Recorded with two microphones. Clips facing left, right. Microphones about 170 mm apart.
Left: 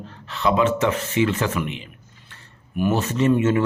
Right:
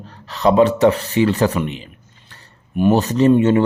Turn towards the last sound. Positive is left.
turn(degrees=-30)  # may be behind; listen again after turning